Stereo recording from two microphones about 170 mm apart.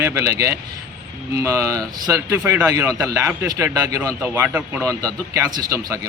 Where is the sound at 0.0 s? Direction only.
15° right (ahead or behind).